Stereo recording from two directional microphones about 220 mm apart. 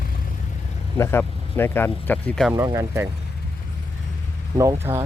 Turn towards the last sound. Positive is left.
turn(degrees=-10)  # may be behind; listen again after turning